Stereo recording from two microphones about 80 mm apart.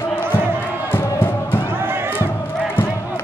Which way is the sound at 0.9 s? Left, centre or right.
Left.